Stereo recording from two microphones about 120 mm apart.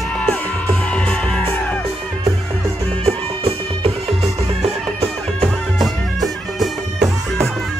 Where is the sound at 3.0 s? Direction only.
55° right (ahead or behind).